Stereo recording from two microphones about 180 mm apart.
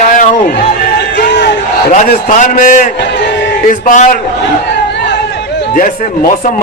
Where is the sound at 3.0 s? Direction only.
75° left (ahead or behind).